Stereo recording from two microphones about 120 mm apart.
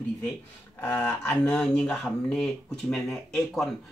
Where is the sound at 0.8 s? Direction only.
10° left (ahead or behind).